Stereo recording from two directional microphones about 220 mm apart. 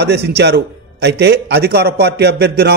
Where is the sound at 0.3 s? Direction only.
50° right (ahead or behind).